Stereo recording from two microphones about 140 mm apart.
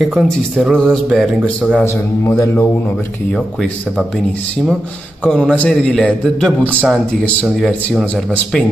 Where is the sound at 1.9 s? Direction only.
15° left (ahead or behind).